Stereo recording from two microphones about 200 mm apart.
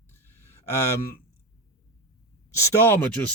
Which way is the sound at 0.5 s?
15° left (ahead or behind).